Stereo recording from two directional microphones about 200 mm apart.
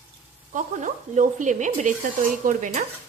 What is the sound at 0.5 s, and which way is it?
Stir, 40° right (ahead or behind).